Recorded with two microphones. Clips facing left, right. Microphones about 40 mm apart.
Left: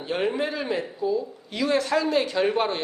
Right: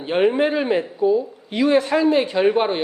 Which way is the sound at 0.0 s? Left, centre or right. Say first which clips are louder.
Right 8 dB; right.